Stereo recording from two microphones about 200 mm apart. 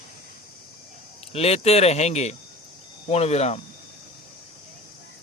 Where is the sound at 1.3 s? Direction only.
30° left (ahead or behind).